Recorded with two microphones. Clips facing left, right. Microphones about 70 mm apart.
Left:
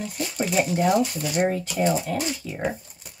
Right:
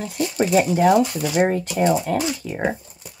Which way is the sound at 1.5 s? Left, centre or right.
Right.